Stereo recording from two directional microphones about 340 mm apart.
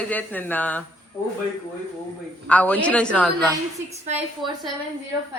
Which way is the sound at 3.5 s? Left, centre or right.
Centre.